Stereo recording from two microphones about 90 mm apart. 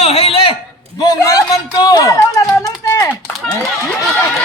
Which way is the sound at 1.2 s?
40° left (ahead or behind).